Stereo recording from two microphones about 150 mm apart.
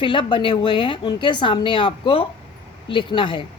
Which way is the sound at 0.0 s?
30° left (ahead or behind).